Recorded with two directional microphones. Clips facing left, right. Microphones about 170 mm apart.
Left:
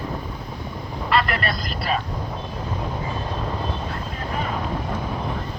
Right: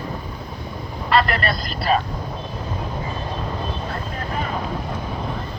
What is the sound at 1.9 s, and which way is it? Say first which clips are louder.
Speech: right 5 dB; 40° right (ahead or behind).